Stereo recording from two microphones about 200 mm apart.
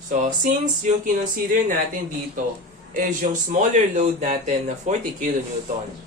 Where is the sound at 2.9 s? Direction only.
40° right (ahead or behind).